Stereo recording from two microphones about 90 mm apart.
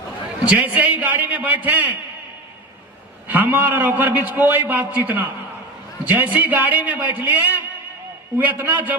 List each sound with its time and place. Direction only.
0.4 s a man's voice: 15° right (ahead or behind)
3.2 s a man's voice: 20° right (ahead or behind)